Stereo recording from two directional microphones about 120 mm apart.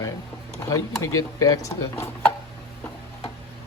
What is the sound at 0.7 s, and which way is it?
Speech, 30° left (ahead or behind).